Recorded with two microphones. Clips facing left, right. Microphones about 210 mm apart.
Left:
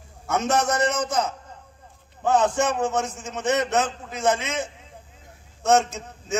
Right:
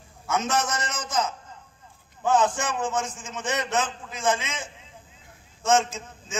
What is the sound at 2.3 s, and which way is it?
A man's voice, 65° left (ahead or behind).